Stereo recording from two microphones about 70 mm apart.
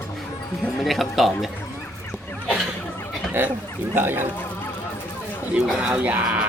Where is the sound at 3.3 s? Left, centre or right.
Right.